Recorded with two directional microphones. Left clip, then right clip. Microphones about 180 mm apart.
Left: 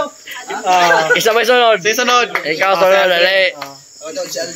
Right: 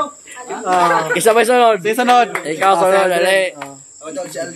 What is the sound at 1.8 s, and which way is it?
Speech, 75° right (ahead or behind).